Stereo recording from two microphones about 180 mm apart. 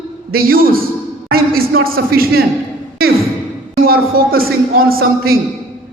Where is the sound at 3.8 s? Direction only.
55° right (ahead or behind).